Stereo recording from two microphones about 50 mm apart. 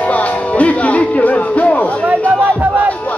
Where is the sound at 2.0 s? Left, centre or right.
Right.